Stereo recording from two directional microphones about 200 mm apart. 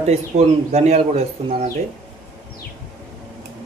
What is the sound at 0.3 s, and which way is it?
Speech, 35° right (ahead or behind).